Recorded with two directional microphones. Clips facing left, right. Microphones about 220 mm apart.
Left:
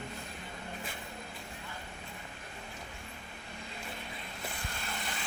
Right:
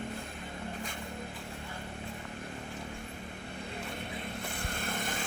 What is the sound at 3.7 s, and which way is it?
Vehicle, 60° right (ahead or behind).